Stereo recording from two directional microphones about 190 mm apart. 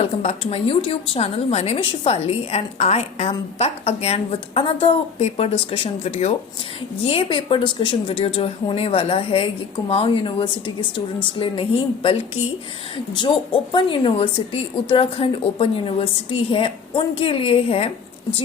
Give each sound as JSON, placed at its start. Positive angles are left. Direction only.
{"t": 0.0, "sound": "a woman's voice", "side_deg": 35}